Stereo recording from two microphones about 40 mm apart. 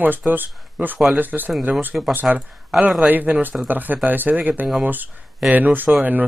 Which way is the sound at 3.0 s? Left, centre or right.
Right.